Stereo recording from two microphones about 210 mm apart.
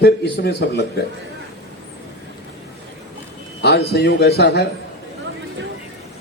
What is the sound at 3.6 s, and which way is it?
A man's voice, 50° left (ahead or behind).